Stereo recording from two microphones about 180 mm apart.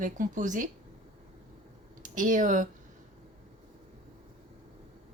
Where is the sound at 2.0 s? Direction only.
45° right (ahead or behind).